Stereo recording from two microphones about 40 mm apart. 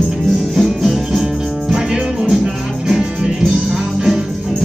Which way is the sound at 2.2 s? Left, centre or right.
Centre.